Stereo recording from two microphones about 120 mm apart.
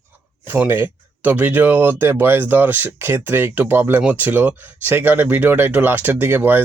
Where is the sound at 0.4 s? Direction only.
15° right (ahead or behind).